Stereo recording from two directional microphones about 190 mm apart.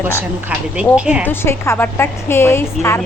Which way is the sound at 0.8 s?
5° right (ahead or behind).